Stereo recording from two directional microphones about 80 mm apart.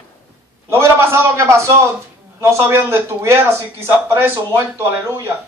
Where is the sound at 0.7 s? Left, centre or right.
Right.